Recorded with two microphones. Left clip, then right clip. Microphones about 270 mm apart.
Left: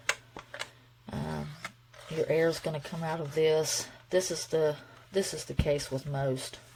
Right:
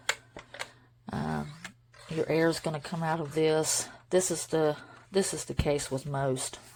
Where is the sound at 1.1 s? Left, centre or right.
Centre.